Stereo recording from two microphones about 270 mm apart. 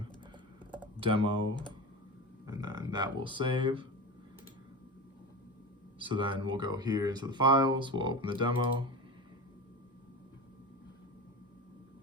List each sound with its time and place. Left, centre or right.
0.9 s speech: centre
2.5 s speech: centre
6.0 s speech: centre